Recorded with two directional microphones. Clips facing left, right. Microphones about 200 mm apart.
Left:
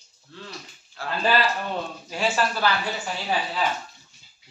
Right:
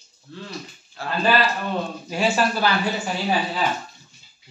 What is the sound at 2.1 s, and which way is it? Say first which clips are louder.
Speech: right 3 dB; 15° right (ahead or behind).